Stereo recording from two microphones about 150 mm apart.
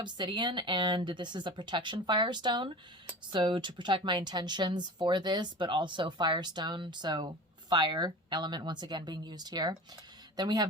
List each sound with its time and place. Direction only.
0.0 s a woman's voice: 30° right (ahead or behind)